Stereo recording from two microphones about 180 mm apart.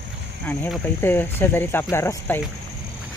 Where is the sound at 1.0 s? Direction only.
10° left (ahead or behind).